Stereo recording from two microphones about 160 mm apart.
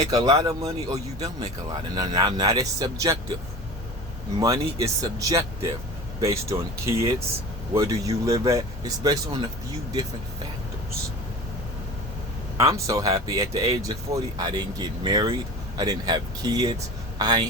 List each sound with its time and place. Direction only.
0.1 s speech: 25° right (ahead or behind)
4.4 s speech: 20° right (ahead or behind)
12.5 s speech: 20° right (ahead or behind)